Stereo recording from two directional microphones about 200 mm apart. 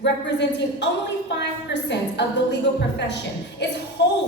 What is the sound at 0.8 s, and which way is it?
A woman's voice, 60° left (ahead or behind).